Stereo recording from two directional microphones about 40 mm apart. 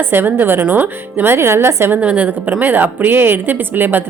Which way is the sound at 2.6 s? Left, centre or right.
Right.